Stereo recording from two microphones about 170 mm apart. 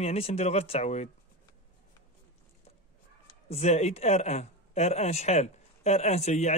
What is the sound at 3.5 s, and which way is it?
Speech, 40° left (ahead or behind).